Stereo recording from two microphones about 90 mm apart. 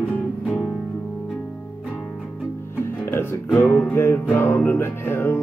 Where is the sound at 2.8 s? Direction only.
25° left (ahead or behind).